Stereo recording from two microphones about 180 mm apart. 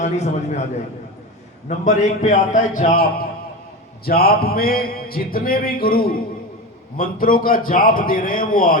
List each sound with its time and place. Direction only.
0.0 s a man's voice: 40° left (ahead or behind)
1.6 s a man's voice: 45° left (ahead or behind)
2.9 s a man's voice: 55° left (ahead or behind)